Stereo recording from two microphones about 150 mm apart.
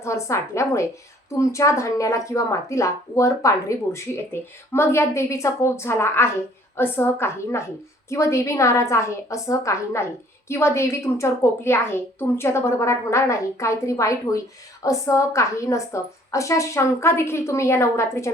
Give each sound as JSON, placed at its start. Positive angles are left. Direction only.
{"t": 0.0, "sound": "a woman's voice", "side_deg": 20}